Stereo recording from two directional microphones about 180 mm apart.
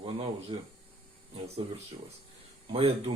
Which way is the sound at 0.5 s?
30° right (ahead or behind).